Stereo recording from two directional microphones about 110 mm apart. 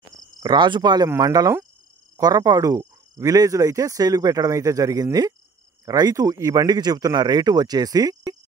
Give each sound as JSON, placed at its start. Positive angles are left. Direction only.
{"t": 0.4, "sound": "cricket", "side_deg": -40}
{"t": 1.0, "sound": "speech", "side_deg": -30}